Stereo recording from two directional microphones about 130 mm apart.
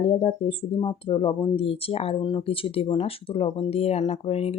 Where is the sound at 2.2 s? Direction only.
35° left (ahead or behind).